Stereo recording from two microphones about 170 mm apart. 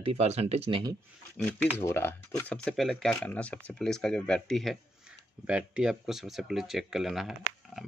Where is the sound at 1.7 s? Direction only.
15° left (ahead or behind).